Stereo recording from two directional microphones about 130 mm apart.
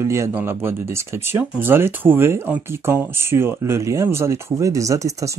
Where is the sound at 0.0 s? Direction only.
20° right (ahead or behind).